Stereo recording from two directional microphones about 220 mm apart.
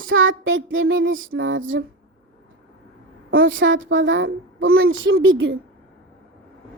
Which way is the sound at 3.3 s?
60° right (ahead or behind).